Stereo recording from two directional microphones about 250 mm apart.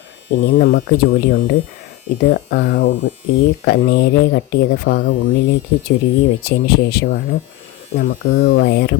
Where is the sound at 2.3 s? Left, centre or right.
Left.